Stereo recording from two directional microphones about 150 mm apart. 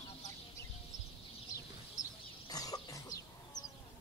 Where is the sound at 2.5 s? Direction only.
25° left (ahead or behind).